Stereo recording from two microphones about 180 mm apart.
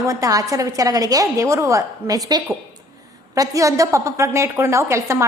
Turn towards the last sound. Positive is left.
turn(degrees=-15)  # may be behind; listen again after turning